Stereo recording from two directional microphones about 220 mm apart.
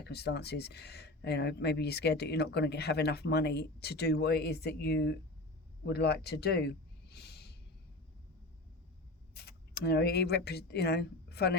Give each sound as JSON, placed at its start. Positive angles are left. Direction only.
{"t": 0.0, "sound": "speech", "side_deg": 45}
{"t": 9.3, "sound": "speech", "side_deg": 45}